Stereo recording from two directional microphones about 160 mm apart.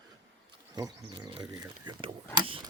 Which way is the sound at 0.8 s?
25° right (ahead or behind).